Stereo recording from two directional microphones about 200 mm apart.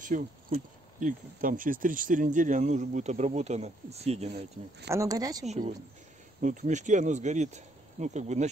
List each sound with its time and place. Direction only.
0.0 s speech: 40° right (ahead or behind)
4.8 s speech: 15° right (ahead or behind)
5.4 s speech: 35° right (ahead or behind)